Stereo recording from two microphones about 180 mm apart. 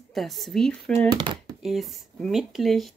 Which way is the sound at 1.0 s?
25° right (ahead or behind).